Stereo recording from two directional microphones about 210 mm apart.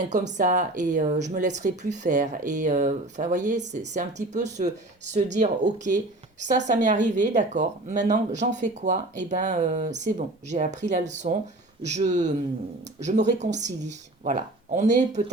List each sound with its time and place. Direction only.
0.1 s speech: 35° right (ahead or behind)